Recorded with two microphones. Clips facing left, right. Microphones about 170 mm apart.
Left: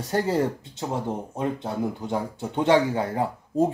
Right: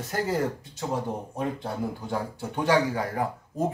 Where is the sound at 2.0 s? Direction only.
25° left (ahead or behind).